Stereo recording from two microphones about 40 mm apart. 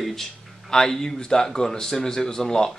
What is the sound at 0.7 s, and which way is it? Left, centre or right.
Speech, centre.